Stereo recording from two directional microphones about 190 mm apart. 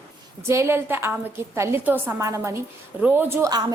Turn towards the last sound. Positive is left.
turn(degrees=-15)  # may be behind; listen again after turning